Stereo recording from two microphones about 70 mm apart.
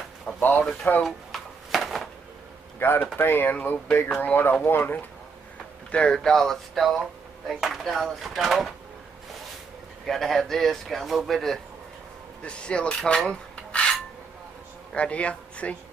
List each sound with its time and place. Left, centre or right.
0.4 s speech: left
1.0 s a sound: centre
2.8 s speech: left
5.9 s a man's voice: centre
10.0 s a man's voice: centre
12.4 s speech: centre
13.3 s filing: centre
15.0 s speech: centre